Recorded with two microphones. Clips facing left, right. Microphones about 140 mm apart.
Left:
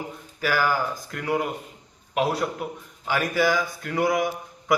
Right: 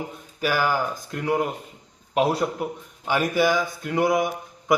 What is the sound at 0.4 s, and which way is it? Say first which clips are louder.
A man's voice: right 1 dB; 15° right (ahead or behind).